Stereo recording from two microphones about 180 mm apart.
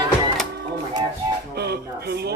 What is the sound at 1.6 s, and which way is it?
Speech, 60° right (ahead or behind).